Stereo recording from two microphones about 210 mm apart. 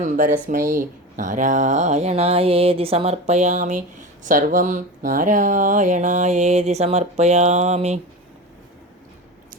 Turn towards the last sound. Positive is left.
turn(degrees=-30)  # may be behind; listen again after turning